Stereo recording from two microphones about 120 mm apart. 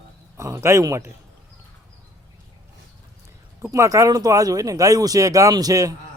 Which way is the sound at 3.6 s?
25° right (ahead or behind).